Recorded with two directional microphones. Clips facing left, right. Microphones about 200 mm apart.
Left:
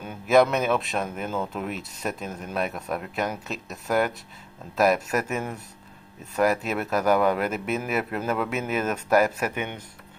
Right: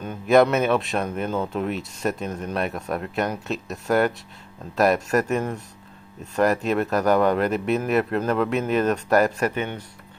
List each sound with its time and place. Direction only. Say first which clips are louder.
0.0 s speech: right 2 dB; centre (ahead or behind)